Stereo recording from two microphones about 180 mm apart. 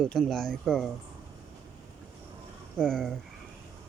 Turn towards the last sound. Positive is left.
turn(degrees=5)  # may be behind; listen again after turning